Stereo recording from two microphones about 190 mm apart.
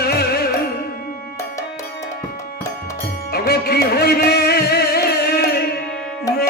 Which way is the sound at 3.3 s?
55° left (ahead or behind).